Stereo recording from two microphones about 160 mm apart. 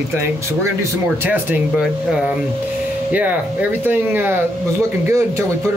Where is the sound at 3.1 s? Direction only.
10° right (ahead or behind).